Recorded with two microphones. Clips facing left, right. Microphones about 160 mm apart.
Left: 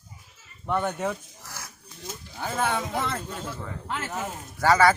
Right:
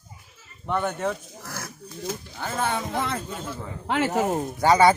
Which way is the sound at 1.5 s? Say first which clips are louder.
Right 7 dB; 60° right (ahead or behind).